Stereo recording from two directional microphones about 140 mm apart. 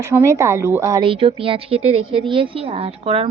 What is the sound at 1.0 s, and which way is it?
A woman's voice, 40° right (ahead or behind).